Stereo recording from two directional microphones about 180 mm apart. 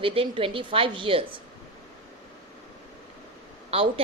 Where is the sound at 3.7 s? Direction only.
30° right (ahead or behind).